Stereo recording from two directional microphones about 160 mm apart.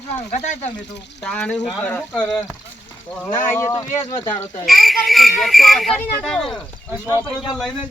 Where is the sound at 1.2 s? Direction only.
5° left (ahead or behind).